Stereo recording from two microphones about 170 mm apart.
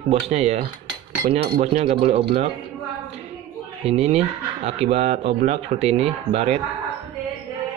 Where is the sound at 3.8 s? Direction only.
40° right (ahead or behind).